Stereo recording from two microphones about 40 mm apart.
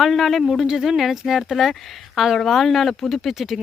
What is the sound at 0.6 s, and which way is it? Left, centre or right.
A woman's voice, centre.